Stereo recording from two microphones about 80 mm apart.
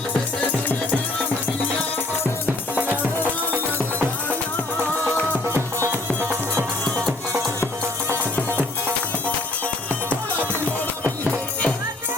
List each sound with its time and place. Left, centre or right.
5.5 s music: right
10.7 s music: centre